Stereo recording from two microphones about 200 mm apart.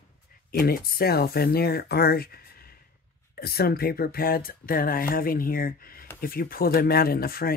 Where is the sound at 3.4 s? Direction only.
50° left (ahead or behind).